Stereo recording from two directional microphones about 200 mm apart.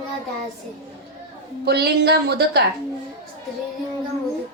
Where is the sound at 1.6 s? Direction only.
55° right (ahead or behind).